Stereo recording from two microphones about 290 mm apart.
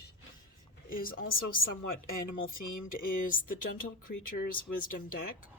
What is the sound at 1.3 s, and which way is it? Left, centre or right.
A woman's voice, left.